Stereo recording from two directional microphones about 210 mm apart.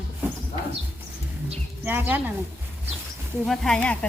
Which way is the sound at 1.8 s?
10° right (ahead or behind).